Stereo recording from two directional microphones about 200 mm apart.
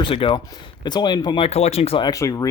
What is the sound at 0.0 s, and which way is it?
Speech, 25° left (ahead or behind).